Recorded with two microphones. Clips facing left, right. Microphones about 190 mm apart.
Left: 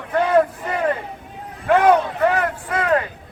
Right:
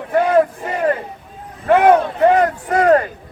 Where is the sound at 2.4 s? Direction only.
40° right (ahead or behind).